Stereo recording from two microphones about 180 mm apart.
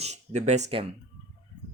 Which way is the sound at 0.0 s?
40° right (ahead or behind).